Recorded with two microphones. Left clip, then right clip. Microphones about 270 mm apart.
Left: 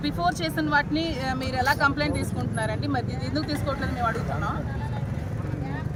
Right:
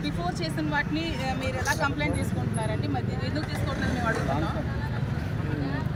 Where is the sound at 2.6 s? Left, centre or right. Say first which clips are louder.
Left 4 dB; centre.